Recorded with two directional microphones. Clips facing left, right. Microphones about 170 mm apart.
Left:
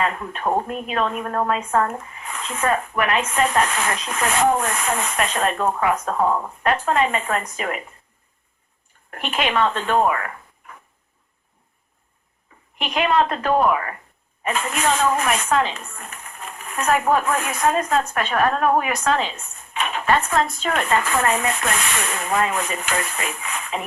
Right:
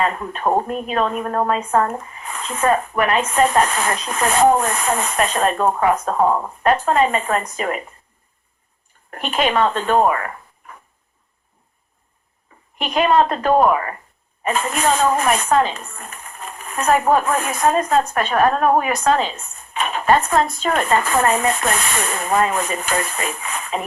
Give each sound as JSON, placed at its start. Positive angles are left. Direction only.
{"t": 0.0, "sound": "a woman's voice", "side_deg": -35}
{"t": 9.0, "sound": "speech", "side_deg": -35}
{"t": 12.8, "sound": "a woman's voice", "side_deg": -40}